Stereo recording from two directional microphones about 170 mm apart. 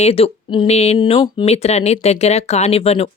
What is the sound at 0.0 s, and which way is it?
Speech, 35° left (ahead or behind).